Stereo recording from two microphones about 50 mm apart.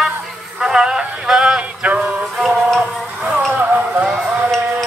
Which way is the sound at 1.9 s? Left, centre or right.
Right.